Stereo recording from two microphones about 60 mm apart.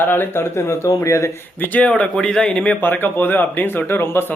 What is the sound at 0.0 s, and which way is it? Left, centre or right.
Speech, left.